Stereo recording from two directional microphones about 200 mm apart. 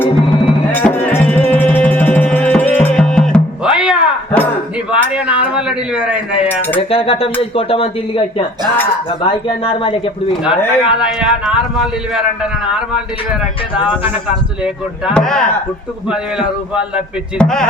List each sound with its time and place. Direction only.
0.0 s music: 10° left (ahead or behind)
4.9 s a sound: 5° right (ahead or behind)
6.5 s cutlery: 10° left (ahead or behind)
6.7 s speech: 30° left (ahead or behind)
10.8 s speech: 5° right (ahead or behind)
14.6 s speech: centre (ahead or behind)